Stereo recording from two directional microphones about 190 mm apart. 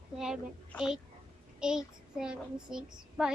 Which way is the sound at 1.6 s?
5° right (ahead or behind).